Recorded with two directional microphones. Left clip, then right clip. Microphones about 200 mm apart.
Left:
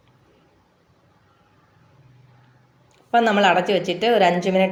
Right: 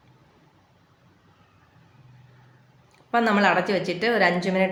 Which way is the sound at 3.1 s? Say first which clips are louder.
Left 4 dB; 10° left (ahead or behind).